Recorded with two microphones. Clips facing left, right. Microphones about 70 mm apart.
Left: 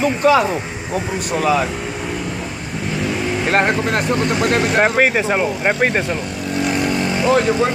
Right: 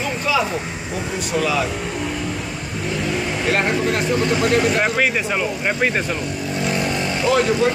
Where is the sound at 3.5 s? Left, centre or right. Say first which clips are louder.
Left 3 dB; left.